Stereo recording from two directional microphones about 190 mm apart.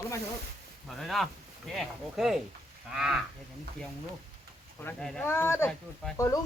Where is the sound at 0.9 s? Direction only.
Centre (ahead or behind).